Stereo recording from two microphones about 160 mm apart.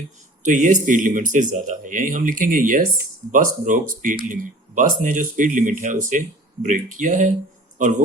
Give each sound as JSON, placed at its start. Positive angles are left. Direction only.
{"t": 0.4, "sound": "speech", "side_deg": -50}